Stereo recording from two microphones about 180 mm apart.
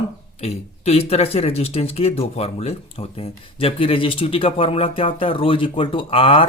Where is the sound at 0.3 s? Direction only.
35° left (ahead or behind).